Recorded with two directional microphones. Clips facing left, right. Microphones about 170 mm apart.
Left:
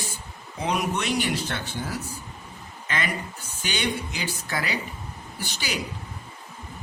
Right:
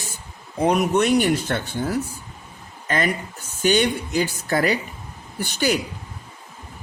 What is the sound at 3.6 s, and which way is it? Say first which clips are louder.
Speech: right 9 dB; 50° right (ahead or behind).